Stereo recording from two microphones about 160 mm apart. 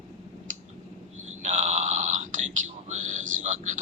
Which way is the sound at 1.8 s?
50° right (ahead or behind).